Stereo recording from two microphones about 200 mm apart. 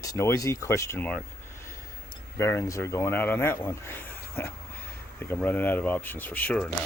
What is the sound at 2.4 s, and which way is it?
Speech, 15° left (ahead or behind).